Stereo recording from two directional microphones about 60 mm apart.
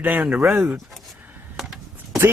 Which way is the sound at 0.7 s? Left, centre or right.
Centre.